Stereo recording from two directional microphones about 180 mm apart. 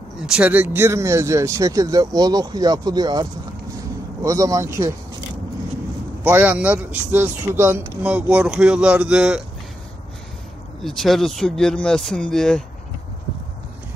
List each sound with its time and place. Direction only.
0.3 s speech: 10° right (ahead or behind)
6.2 s speech: 10° right (ahead or behind)
10.8 s speech: centre (ahead or behind)